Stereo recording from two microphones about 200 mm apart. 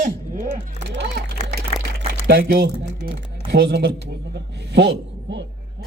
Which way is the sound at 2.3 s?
50° right (ahead or behind).